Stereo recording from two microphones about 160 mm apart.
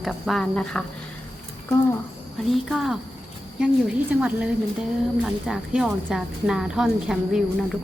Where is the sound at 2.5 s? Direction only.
Centre (ahead or behind).